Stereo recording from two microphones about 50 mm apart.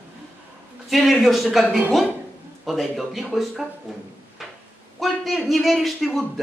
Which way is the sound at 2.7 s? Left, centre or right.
Centre.